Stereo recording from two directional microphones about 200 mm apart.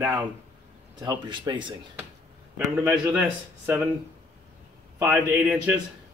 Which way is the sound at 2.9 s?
10° right (ahead or behind).